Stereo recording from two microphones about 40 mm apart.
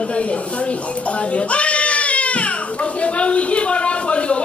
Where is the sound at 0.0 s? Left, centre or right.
Left.